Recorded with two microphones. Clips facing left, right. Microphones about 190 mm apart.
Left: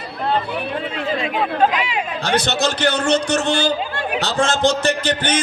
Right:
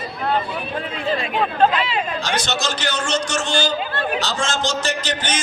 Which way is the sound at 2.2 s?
60° left (ahead or behind).